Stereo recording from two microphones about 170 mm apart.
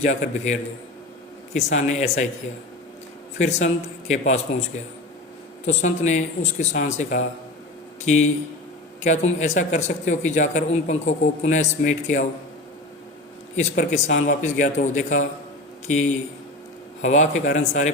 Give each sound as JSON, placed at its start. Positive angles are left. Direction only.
{"t": 0.0, "sound": "speech", "side_deg": 45}
{"t": 3.3, "sound": "speech", "side_deg": 45}
{"t": 5.6, "sound": "speech", "side_deg": 45}
{"t": 13.6, "sound": "speech", "side_deg": 45}